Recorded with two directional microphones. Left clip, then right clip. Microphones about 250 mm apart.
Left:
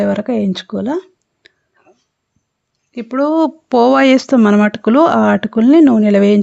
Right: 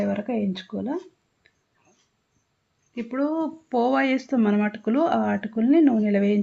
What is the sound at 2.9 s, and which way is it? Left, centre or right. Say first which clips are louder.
Speech: left 12 dB; left.